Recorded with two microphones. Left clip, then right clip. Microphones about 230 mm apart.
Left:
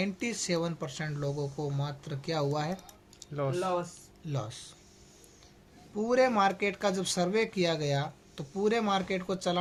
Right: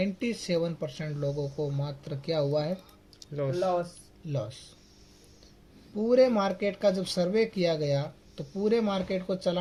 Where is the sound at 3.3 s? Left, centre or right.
Left.